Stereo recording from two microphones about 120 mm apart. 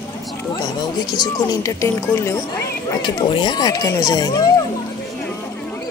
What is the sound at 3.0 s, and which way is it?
Speech, 40° left (ahead or behind).